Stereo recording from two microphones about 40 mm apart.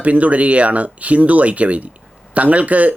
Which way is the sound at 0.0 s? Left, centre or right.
Right.